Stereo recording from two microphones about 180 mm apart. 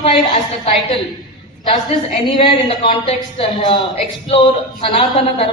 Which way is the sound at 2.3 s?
30° left (ahead or behind).